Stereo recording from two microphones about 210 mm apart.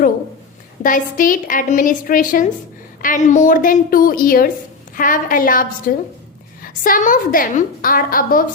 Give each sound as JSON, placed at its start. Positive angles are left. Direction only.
{"t": 0.8, "sound": "a woman's voice", "side_deg": 40}